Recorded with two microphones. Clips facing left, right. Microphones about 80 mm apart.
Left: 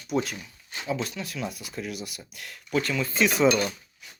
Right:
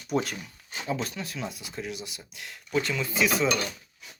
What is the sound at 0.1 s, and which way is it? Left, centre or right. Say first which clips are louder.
Speech: even; right.